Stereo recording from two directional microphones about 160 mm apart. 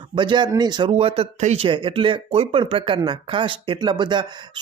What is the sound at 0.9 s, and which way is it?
Speech, 35° right (ahead or behind).